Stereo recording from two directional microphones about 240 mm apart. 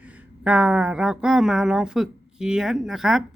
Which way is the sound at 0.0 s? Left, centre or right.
Centre.